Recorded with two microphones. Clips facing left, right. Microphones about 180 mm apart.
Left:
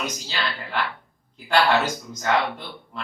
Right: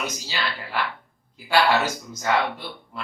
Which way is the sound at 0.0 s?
5° right (ahead or behind).